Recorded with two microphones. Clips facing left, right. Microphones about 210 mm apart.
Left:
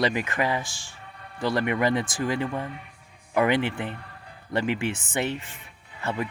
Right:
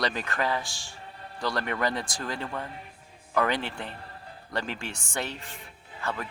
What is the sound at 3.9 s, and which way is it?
Speech, 30° right (ahead or behind).